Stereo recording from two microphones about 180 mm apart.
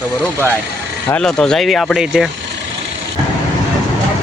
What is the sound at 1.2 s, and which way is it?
Speech, 5° left (ahead or behind).